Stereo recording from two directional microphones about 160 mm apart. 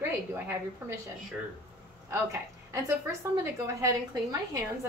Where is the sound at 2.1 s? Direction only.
20° right (ahead or behind).